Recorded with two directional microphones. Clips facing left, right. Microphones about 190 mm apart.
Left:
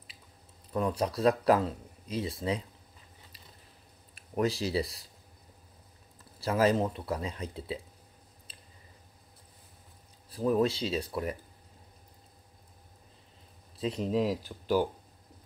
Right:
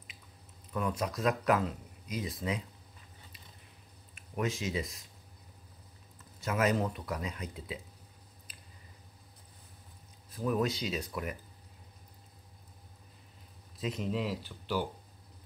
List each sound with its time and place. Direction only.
0.7 s speech: 30° left (ahead or behind)
4.1 s speech: 35° left (ahead or behind)
6.4 s speech: 30° left (ahead or behind)
8.5 s squish: 30° left (ahead or behind)
10.3 s speech: 30° left (ahead or behind)
13.7 s speech: 35° left (ahead or behind)